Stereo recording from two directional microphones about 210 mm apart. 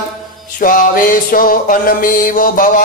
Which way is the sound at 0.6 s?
40° left (ahead or behind).